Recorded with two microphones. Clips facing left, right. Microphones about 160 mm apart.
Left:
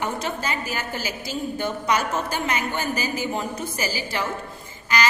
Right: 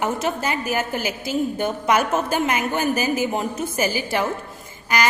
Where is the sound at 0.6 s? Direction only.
50° right (ahead or behind).